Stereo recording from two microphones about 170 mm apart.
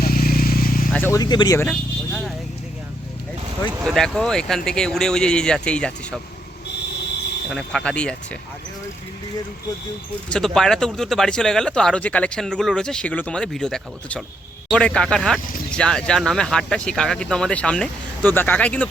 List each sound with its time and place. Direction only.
0.0 s vehicle: 60° left (ahead or behind)
0.9 s speech: 15° left (ahead or behind)
3.8 s speech: centre (ahead or behind)
7.5 s speech: 5° left (ahead or behind)
10.2 s speech: 5° left (ahead or behind)